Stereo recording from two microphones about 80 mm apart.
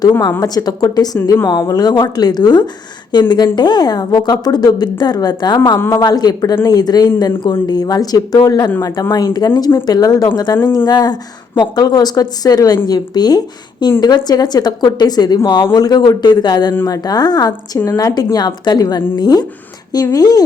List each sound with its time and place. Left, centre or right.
0.2 s a woman's voice: left
5.7 s speech: left
6.0 s a woman's voice: left
15.4 s a woman's voice: left